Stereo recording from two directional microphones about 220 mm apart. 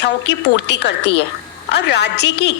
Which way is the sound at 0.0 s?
50° left (ahead or behind).